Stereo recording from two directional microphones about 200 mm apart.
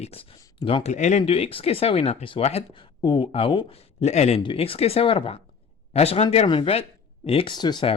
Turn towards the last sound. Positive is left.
turn(degrees=25)  # may be behind; listen again after turning